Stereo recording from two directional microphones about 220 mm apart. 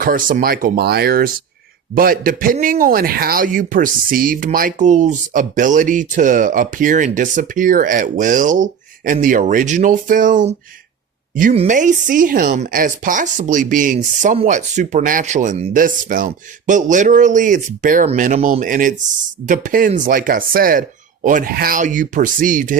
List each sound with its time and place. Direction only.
0.0 s speech: 40° right (ahead or behind)